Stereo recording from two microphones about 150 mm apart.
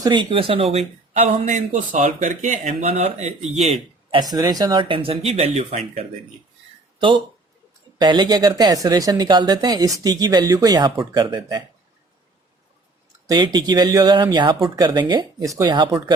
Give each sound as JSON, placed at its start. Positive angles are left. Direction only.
{"t": 0.0, "sound": "speech", "side_deg": -30}
{"t": 1.1, "sound": "speech", "side_deg": -55}
{"t": 4.1, "sound": "speech", "side_deg": -25}
{"t": 7.9, "sound": "speech", "side_deg": -30}
{"t": 13.2, "sound": "speech", "side_deg": -30}